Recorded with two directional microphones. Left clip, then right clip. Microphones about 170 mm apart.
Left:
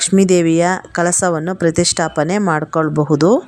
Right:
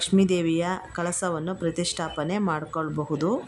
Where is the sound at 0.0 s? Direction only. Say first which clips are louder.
Left 10 dB; 40° left (ahead or behind).